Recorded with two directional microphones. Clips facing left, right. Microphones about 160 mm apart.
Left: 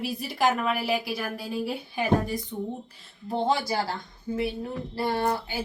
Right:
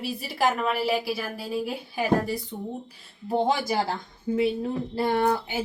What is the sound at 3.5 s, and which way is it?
Speech, 15° right (ahead or behind).